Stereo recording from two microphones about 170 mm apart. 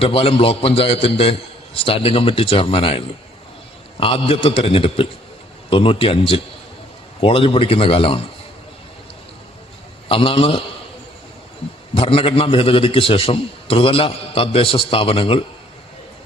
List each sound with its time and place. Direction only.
0.0 s a man's voice: 35° left (ahead or behind)
10.1 s a man's voice: 30° left (ahead or behind)
11.9 s a man's voice: 35° left (ahead or behind)